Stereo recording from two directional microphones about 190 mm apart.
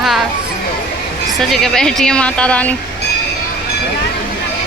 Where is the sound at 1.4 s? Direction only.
Centre (ahead or behind).